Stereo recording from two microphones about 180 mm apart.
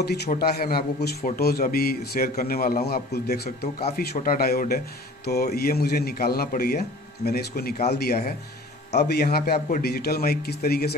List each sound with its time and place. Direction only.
0.0 s a man's voice: 65° left (ahead or behind)